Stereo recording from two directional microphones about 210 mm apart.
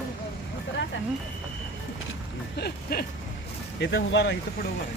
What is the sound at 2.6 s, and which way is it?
Speech, 45° left (ahead or behind).